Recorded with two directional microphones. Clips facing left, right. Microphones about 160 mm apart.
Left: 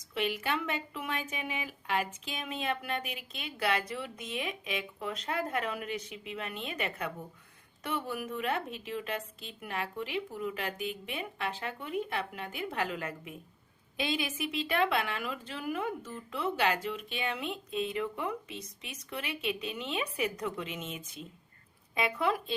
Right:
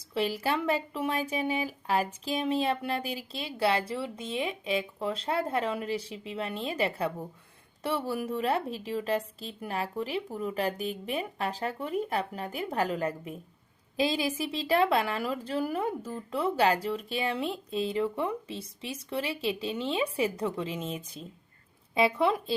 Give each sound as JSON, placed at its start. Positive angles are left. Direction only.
{"t": 0.1, "sound": "a woman's voice", "side_deg": -35}